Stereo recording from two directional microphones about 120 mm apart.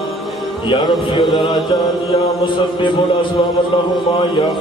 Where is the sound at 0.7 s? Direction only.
40° left (ahead or behind).